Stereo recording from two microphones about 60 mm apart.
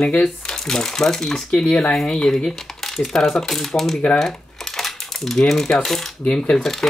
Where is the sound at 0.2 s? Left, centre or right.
Centre.